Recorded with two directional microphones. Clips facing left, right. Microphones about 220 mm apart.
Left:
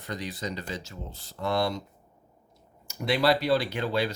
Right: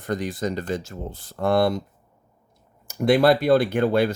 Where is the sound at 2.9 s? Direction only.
50° right (ahead or behind).